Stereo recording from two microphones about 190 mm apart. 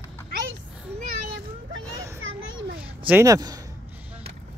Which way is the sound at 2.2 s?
90° right.